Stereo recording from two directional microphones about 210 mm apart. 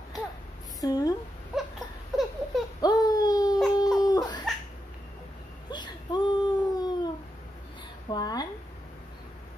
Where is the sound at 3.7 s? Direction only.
20° left (ahead or behind).